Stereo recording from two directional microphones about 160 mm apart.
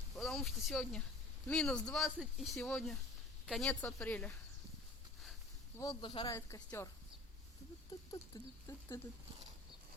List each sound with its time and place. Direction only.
0.2 s speech: centre (ahead or behind)
3.7 s speech: 10° left (ahead or behind)
5.7 s patter: 25° left (ahead or behind)
6.3 s speech: 15° left (ahead or behind)
8.1 s patter: 20° left (ahead or behind)